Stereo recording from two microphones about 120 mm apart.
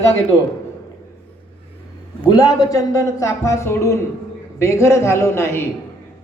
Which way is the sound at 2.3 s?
30° left (ahead or behind).